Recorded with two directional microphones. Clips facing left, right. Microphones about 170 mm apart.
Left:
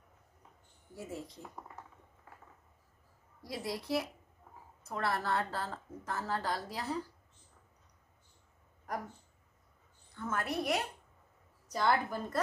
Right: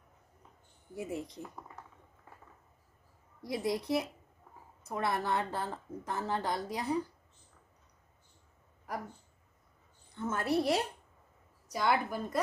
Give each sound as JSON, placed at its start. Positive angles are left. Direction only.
{"t": 0.9, "sound": "a woman's voice", "side_deg": -15}
{"t": 3.4, "sound": "a woman's voice", "side_deg": -20}
{"t": 10.1, "sound": "a woman's voice", "side_deg": -25}
{"t": 11.7, "sound": "a woman's voice", "side_deg": -10}